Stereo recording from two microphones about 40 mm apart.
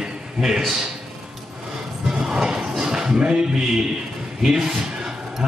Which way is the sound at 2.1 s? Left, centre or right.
Centre.